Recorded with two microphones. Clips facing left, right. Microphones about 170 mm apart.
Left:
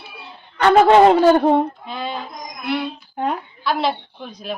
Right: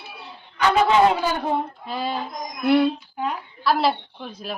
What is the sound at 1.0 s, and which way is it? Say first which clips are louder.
Speech: left 7 dB; 45° left (ahead or behind).